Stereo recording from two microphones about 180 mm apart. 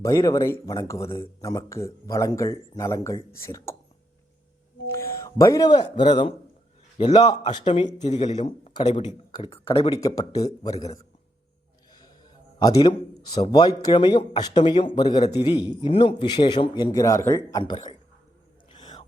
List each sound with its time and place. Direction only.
0.0 s speech: 20° left (ahead or behind)
4.9 s a man's voice: 15° left (ahead or behind)
12.5 s a man's voice: 25° left (ahead or behind)
17.6 s a man's voice: 30° left (ahead or behind)
18.7 s whispering: 25° left (ahead or behind)